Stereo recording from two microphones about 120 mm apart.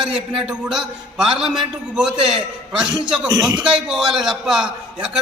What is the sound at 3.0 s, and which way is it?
Speech, 10° right (ahead or behind).